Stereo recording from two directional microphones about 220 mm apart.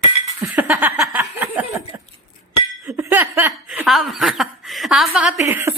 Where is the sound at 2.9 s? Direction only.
10° right (ahead or behind).